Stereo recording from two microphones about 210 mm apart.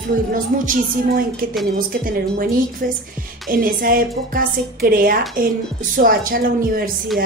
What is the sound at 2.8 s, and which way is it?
A woman's voice, 45° right (ahead or behind).